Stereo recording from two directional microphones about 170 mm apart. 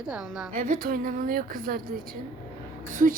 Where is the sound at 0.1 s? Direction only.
5° right (ahead or behind).